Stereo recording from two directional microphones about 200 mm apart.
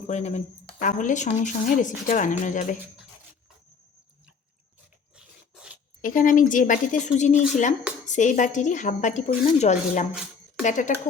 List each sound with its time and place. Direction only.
0.1 s speech: 35° left (ahead or behind)
5.1 s filing: 5° right (ahead or behind)
6.0 s speech: 40° left (ahead or behind)